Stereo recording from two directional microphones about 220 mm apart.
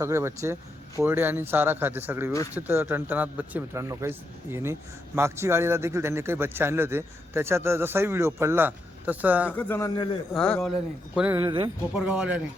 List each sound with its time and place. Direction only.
0.0 s a man's voice: 10° right (ahead or behind)
9.5 s speech: 10° left (ahead or behind)
10.3 s speech: 5° left (ahead or behind)
11.4 s speech: 20° right (ahead or behind)
11.9 s speech: 5° right (ahead or behind)